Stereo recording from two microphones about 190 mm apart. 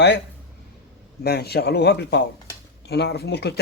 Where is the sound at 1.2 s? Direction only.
60° left (ahead or behind).